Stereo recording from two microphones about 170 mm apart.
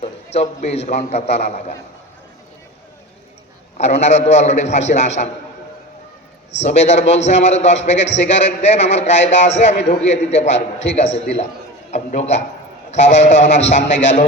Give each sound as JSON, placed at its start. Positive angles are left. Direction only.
{"t": 0.0, "sound": "a man's voice", "side_deg": 40}
{"t": 3.8, "sound": "a man's voice", "side_deg": 40}
{"t": 6.6, "sound": "a man's voice", "side_deg": 40}